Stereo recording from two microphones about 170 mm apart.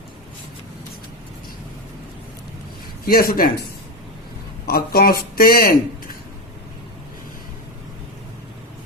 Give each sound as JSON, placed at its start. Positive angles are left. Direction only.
{"t": 3.0, "sound": "a man's voice", "side_deg": 60}
{"t": 4.6, "sound": "speech", "side_deg": 65}